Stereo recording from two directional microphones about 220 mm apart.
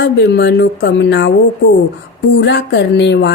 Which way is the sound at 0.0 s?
50° left (ahead or behind).